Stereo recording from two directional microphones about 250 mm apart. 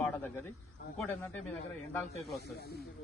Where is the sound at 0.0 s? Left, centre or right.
Centre.